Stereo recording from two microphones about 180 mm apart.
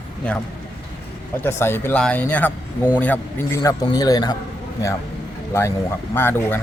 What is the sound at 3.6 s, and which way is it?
Speech, 20° left (ahead or behind).